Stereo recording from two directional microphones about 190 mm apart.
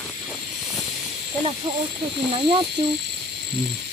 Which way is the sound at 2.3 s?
25° right (ahead or behind).